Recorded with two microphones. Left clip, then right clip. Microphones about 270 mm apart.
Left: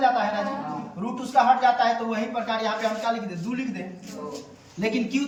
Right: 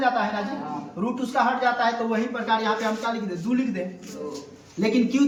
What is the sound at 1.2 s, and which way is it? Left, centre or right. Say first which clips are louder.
A woman's voice: left 4 dB; centre.